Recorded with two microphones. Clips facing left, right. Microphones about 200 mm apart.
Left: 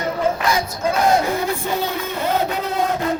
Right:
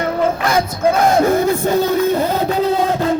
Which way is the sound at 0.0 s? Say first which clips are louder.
Right 3 dB; 55° right (ahead or behind).